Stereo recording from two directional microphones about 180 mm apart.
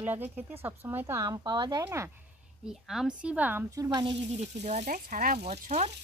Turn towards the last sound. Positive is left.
turn(degrees=-40)  # may be behind; listen again after turning